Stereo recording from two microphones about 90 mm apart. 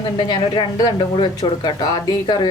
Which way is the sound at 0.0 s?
60° left (ahead or behind).